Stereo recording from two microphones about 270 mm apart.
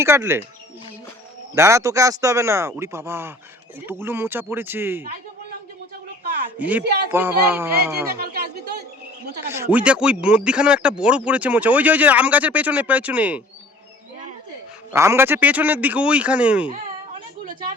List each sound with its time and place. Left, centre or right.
0.0 s speech: centre
1.5 s speech: centre
6.6 s speech: centre
6.8 s speech: right
7.1 s speech: centre
9.2 s speech: right
9.7 s speech: centre
14.9 s speech: centre
17.4 s a sound: right